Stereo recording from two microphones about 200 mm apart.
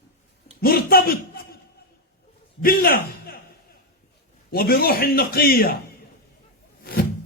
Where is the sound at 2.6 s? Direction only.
45° left (ahead or behind).